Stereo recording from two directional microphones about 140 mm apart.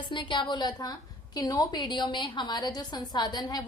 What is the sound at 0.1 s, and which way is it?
A woman's voice, 35° left (ahead or behind).